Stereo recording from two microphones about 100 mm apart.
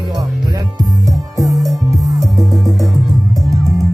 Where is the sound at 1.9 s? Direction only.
Centre (ahead or behind).